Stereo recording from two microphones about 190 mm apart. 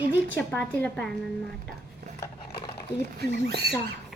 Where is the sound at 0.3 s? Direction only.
10° left (ahead or behind).